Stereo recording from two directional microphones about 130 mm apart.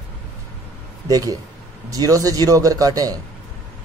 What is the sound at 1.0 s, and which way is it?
A man's voice, 30° right (ahead or behind).